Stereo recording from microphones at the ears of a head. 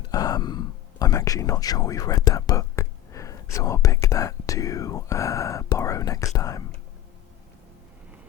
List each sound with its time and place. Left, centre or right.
0.0 s speech: left